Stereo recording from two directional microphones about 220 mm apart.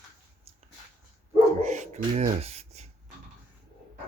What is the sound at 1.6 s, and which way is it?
Beatboxing, 35° right (ahead or behind).